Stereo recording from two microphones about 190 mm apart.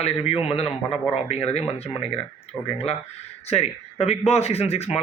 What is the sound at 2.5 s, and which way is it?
Speech, 15° left (ahead or behind).